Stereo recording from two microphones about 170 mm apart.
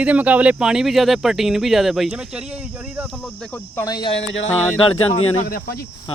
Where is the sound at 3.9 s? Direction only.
25° left (ahead or behind).